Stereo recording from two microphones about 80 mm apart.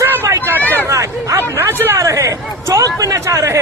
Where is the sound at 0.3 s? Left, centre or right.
Right.